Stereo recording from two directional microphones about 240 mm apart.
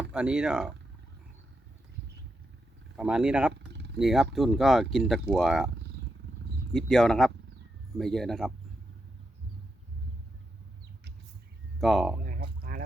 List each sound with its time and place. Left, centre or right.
0.1 s speech: centre
3.0 s speech: centre
3.5 s a sound: right
3.9 s speech: centre
6.7 s speech: centre
11.8 s speech: centre
12.2 s a sound: right